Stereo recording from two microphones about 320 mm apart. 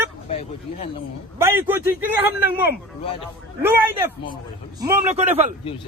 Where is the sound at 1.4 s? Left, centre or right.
Centre.